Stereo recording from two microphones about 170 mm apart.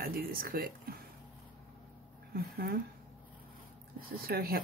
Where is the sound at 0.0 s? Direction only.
60° right (ahead or behind).